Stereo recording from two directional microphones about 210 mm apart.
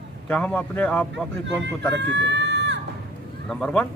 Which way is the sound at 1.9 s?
55° right (ahead or behind).